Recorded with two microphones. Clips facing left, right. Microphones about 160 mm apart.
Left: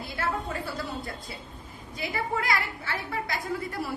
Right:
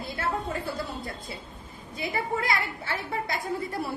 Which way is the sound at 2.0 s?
25° right (ahead or behind).